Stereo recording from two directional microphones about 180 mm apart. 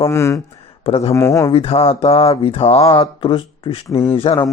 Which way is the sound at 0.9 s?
35° left (ahead or behind).